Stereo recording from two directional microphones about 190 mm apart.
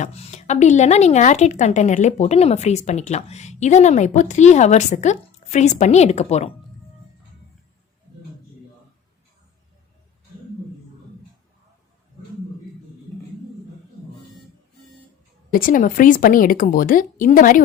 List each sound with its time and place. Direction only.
0.0 s a woman's voice: 35° left (ahead or behind)
15.5 s a woman's voice: 45° left (ahead or behind)